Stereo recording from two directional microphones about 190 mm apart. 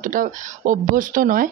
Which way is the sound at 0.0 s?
45° right (ahead or behind).